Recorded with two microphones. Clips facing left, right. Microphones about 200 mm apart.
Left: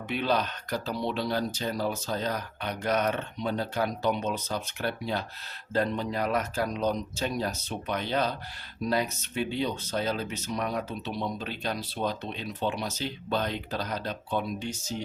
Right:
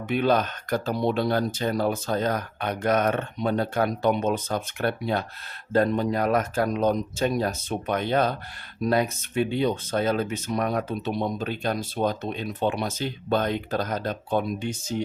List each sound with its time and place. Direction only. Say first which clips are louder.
0.1 s speech: right 6 dB; 50° right (ahead or behind)